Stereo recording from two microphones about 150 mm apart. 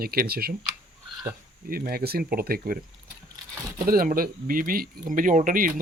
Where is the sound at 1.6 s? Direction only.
75° right (ahead or behind).